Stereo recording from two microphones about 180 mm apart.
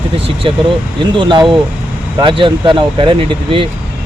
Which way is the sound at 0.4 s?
30° right (ahead or behind).